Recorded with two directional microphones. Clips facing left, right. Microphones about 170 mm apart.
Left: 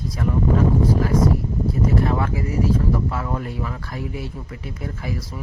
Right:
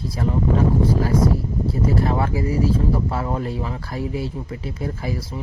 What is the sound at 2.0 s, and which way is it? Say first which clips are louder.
Speech: right 1 dB; 30° right (ahead or behind).